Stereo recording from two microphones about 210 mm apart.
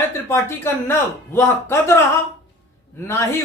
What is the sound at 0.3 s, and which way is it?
Speech, 10° left (ahead or behind).